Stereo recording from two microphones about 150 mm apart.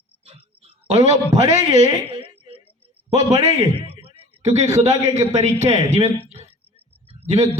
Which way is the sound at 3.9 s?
45° right (ahead or behind).